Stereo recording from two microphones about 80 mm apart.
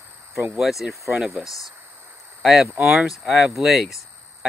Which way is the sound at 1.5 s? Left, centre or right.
Left.